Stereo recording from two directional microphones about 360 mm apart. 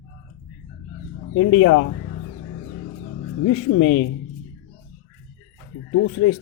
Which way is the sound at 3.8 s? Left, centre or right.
Left.